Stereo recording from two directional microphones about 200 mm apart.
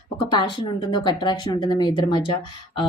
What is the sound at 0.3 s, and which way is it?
Speech, 25° left (ahead or behind).